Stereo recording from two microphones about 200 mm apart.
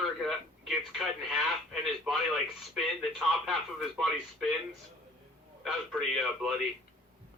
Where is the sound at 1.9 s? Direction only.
Centre (ahead or behind).